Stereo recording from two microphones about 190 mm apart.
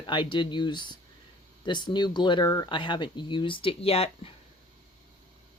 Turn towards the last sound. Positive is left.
turn(degrees=30)  # may be behind; listen again after turning